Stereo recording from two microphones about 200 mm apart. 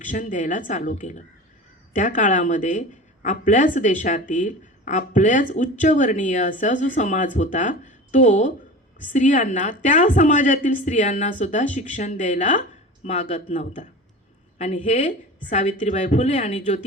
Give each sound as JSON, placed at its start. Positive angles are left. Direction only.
{"t": 0.0, "sound": "a woman's voice", "side_deg": 40}